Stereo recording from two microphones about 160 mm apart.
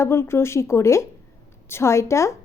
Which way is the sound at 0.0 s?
15° left (ahead or behind).